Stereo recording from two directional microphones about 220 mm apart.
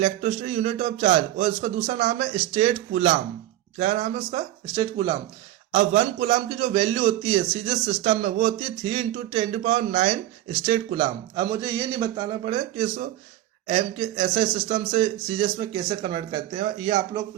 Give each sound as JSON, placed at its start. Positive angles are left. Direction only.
{"t": 0.0, "sound": "a man's voice", "side_deg": -30}
{"t": 5.7, "sound": "a man's voice", "side_deg": -30}
{"t": 11.0, "sound": "a man's voice", "side_deg": -15}